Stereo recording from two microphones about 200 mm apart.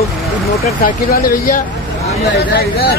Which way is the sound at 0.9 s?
45° left (ahead or behind).